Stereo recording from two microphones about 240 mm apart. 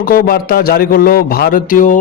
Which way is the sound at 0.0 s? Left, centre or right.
Left.